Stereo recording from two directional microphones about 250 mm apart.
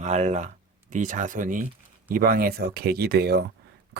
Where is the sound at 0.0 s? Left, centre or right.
Right.